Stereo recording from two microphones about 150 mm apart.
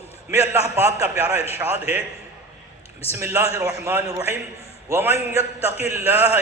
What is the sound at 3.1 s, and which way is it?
Mantra, 15° right (ahead or behind).